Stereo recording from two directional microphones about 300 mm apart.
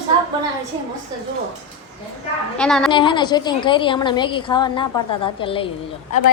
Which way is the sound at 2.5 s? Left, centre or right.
Centre.